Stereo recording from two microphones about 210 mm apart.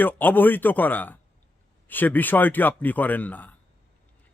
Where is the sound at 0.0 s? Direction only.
10° left (ahead or behind).